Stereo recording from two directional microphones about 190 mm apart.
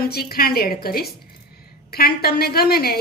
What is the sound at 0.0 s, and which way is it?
A woman's voice, 55° left (ahead or behind).